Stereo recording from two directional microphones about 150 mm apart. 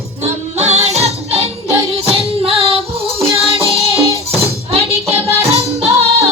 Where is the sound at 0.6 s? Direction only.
45° right (ahead or behind).